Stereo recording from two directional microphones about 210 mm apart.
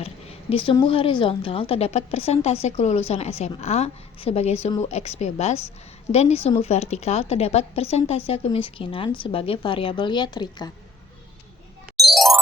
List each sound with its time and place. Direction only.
0.0 s a woman's voice: 25° left (ahead or behind)
11.9 s music: centre (ahead or behind)